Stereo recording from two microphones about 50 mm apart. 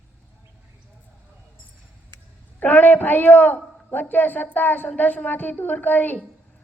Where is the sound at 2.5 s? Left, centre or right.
Left.